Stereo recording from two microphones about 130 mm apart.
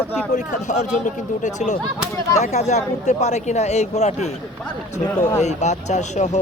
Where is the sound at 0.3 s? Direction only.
65° left (ahead or behind).